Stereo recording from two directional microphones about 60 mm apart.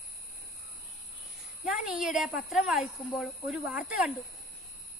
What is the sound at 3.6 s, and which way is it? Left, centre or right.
Speech, centre.